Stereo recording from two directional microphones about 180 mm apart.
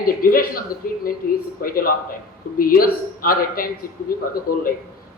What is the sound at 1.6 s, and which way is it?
A man's voice, 55° left (ahead or behind).